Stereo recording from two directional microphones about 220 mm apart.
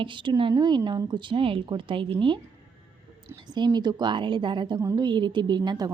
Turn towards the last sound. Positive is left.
turn(degrees=-20)  # may be behind; listen again after turning